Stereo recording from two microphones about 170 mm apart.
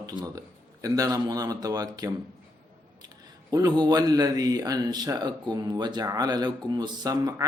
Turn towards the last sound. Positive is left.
turn(degrees=-20)  # may be behind; listen again after turning